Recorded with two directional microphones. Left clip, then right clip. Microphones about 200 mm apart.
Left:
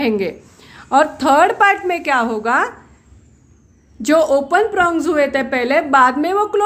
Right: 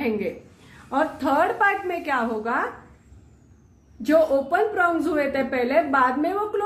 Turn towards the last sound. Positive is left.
turn(degrees=50)  # may be behind; listen again after turning